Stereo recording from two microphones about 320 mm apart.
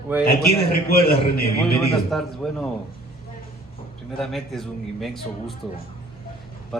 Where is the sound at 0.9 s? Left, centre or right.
Left.